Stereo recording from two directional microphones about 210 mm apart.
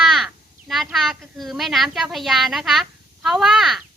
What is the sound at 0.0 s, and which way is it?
Speech, centre (ahead or behind).